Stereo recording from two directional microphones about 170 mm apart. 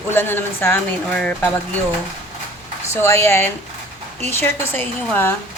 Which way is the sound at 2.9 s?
15° left (ahead or behind).